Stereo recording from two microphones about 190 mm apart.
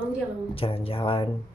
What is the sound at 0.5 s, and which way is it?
Speech, 30° left (ahead or behind).